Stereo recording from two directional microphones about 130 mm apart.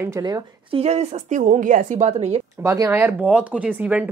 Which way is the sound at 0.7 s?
50° right (ahead or behind).